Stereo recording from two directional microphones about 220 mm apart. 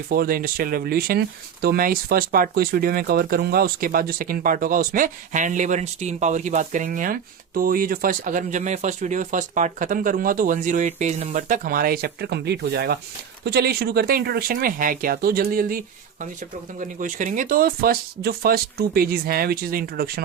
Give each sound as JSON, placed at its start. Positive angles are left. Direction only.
{"t": 0.1, "sound": "speech", "side_deg": -40}
{"t": 16.8, "sound": "speech", "side_deg": -35}